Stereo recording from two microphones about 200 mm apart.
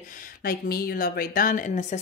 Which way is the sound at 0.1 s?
45° left (ahead or behind).